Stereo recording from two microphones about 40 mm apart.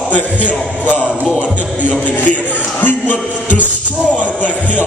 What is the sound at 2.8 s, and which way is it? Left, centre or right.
Speech, left.